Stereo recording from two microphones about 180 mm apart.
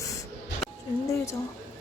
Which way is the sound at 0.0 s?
15° left (ahead or behind).